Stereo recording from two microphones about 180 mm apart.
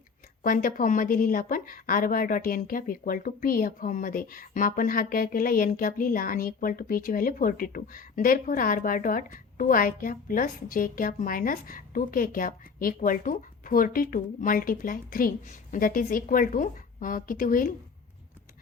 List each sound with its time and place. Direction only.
0.4 s a woman's voice: 50° left (ahead or behind)